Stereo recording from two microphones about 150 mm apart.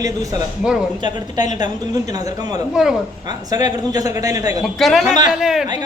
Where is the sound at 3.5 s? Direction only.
25° right (ahead or behind).